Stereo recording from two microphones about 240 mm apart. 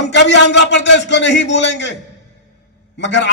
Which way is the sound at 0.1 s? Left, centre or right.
Left.